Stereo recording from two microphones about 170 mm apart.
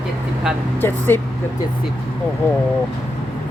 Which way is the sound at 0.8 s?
15° left (ahead or behind).